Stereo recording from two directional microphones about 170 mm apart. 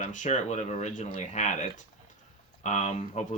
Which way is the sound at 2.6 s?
45° left (ahead or behind).